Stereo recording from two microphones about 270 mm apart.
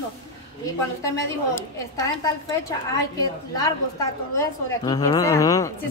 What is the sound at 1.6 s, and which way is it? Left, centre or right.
A woman's voice, centre.